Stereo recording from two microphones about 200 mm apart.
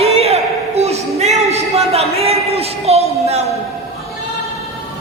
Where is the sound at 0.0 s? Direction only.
30° right (ahead or behind).